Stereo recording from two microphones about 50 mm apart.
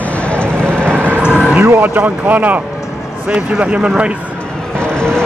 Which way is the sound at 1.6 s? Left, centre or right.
Right.